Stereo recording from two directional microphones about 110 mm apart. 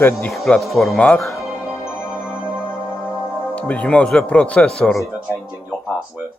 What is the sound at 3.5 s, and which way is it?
Speech, 15° left (ahead or behind).